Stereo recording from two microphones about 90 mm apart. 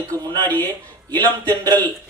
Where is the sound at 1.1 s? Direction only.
20° left (ahead or behind).